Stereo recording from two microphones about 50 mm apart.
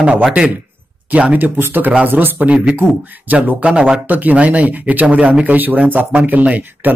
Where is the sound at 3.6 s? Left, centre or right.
Right.